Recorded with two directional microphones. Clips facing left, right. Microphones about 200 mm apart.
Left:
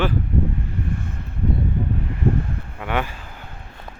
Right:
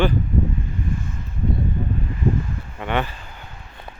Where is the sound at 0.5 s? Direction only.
65° left (ahead or behind).